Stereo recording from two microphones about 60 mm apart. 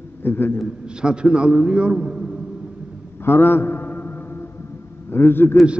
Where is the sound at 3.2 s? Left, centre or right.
Left.